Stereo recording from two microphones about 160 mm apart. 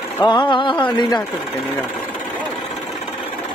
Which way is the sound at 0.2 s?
30° left (ahead or behind).